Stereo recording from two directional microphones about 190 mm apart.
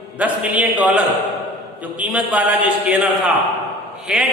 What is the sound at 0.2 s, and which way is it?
Singing, 5° right (ahead or behind).